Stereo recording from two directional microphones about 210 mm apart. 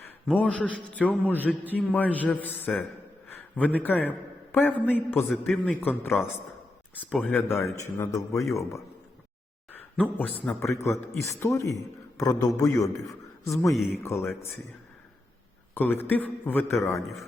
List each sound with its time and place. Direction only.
0.3 s speech: 5° left (ahead or behind)
10.0 s speech: 10° left (ahead or behind)
15.7 s speech: 10° left (ahead or behind)